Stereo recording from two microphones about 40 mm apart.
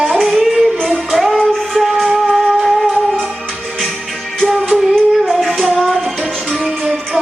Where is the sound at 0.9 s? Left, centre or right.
Centre.